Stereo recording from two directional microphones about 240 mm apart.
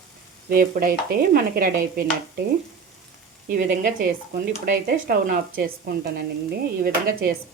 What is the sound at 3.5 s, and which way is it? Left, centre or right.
Speech, right.